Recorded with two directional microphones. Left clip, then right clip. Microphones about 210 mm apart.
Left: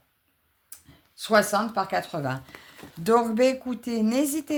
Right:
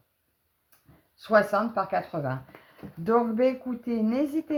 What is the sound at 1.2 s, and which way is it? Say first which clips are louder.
Speech: left 1 dB; 30° left (ahead or behind).